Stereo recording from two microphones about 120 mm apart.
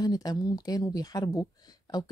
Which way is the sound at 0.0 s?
35° left (ahead or behind).